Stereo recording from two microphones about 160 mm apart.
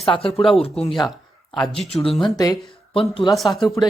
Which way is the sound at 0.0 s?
35° left (ahead or behind).